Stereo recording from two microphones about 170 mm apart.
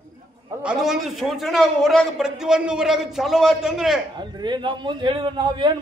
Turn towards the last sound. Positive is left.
turn(degrees=-25)  # may be behind; listen again after turning